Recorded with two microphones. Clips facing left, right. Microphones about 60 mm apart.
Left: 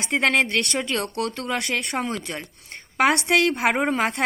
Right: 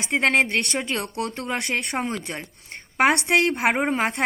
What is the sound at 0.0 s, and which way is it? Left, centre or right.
Speech, centre.